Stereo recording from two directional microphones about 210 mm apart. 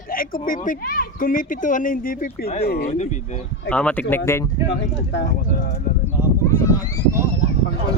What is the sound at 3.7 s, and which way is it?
Speech, 5° left (ahead or behind).